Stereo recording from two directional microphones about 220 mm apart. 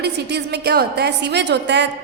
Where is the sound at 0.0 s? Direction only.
50° right (ahead or behind).